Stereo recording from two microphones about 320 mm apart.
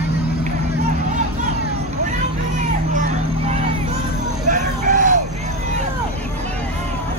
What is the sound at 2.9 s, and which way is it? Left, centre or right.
Vehicle, right.